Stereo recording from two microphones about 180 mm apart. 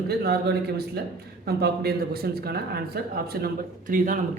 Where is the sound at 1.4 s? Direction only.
60° right (ahead or behind); by 4.2 s 45° right (ahead or behind).